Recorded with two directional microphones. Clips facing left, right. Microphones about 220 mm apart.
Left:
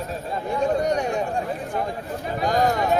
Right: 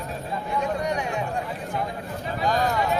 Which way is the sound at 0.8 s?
45° left (ahead or behind).